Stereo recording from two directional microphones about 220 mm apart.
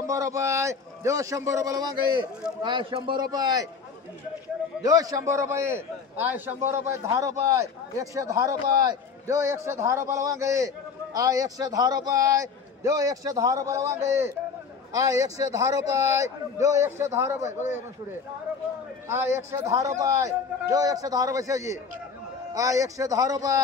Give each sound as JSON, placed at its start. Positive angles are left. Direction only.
{"t": 0.0, "sound": "a man's voice", "side_deg": -15}
{"t": 4.8, "sound": "a man's voice", "side_deg": -15}
{"t": 19.0, "sound": "a man's voice", "side_deg": -10}